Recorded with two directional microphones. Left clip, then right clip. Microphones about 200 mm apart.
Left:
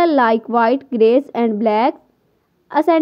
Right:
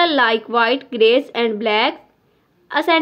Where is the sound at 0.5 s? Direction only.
50° left (ahead or behind).